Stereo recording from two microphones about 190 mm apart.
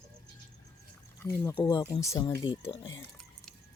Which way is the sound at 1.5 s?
25° left (ahead or behind).